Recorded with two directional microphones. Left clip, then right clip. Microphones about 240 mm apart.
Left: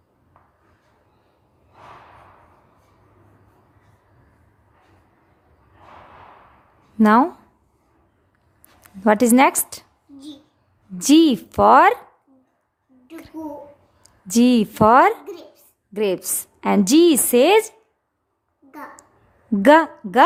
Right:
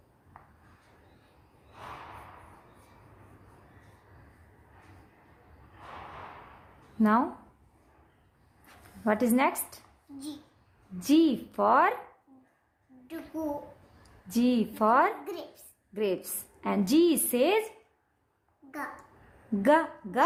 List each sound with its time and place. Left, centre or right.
7.0 s a woman's voice: left
9.0 s a woman's voice: left
10.9 s a woman's voice: left
14.0 s a woman's voice: left
15.2 s a woman's voice: centre
15.9 s a woman's voice: left
19.6 s a woman's voice: left